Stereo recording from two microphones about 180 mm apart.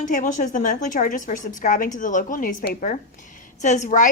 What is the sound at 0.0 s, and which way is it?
A woman's voice, 45° left (ahead or behind).